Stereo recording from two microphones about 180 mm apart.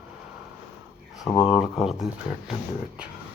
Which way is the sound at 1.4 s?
Centre (ahead or behind).